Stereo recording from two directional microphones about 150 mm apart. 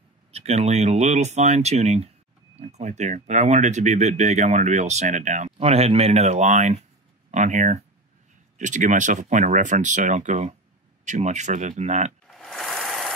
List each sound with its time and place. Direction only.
0.3 s speech: 45° right (ahead or behind)
12.3 s filing: centre (ahead or behind)